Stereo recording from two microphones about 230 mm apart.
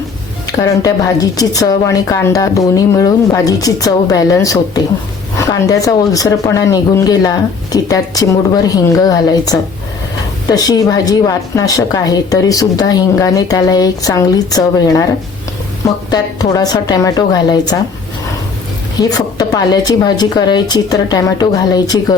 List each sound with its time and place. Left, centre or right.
0.5 s a woman's voice: centre
16.0 s a woman's voice: centre
18.9 s a woman's voice: centre